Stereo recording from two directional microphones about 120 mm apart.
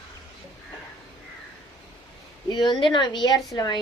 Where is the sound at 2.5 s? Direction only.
40° left (ahead or behind).